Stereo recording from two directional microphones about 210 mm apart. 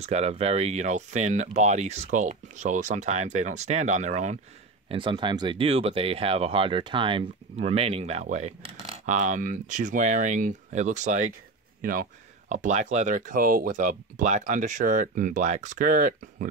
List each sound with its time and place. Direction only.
0.0 s speech: 30° right (ahead or behind)
4.8 s speech: 25° right (ahead or behind); by 16.4 s 40° right (ahead or behind)